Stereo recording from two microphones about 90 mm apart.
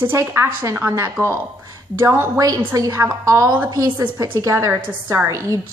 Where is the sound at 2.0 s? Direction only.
25° right (ahead or behind).